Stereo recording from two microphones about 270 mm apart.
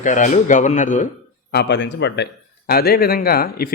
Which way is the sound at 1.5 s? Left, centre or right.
Left.